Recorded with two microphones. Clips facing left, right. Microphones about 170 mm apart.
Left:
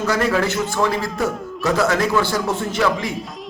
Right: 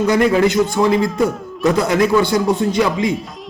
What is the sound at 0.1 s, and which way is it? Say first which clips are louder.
A man's voice: right 5 dB; 15° right (ahead or behind).